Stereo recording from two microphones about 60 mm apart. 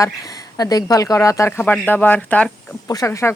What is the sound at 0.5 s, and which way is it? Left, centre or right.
Speech, left.